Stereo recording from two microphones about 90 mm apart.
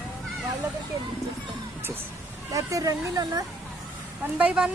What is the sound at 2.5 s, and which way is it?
Speech, 40° right (ahead or behind).